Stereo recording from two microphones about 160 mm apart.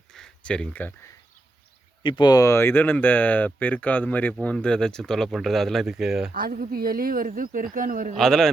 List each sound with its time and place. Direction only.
0.1 s a sound: 5° left (ahead or behind)
2.0 s speech: 30° left (ahead or behind); by 6.3 s centre (ahead or behind)
6.3 s a woman's voice: 65° right (ahead or behind)
8.1 s a man's voice: centre (ahead or behind)